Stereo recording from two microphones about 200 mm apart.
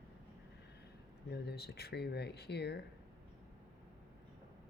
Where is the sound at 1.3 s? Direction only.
55° left (ahead or behind).